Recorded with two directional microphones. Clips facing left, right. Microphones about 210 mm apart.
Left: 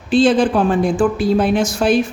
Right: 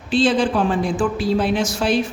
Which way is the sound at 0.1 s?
50° left (ahead or behind).